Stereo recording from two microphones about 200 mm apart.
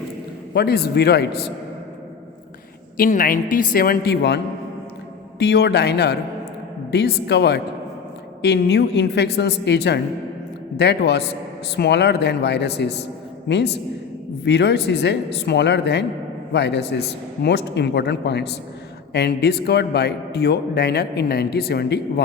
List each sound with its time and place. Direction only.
0.5 s speech: 50° left (ahead or behind)
3.0 s a man's voice: 45° left (ahead or behind)
5.4 s a man's voice: 55° left (ahead or behind)